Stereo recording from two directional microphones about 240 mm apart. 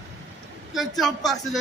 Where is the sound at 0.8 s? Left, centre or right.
Centre.